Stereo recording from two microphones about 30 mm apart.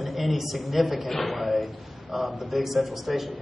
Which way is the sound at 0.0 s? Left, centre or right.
Centre.